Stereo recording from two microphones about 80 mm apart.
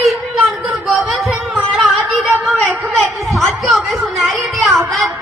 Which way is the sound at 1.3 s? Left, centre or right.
Centre.